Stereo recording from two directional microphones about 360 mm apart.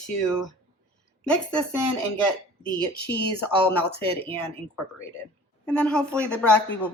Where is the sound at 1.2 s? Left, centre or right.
Centre.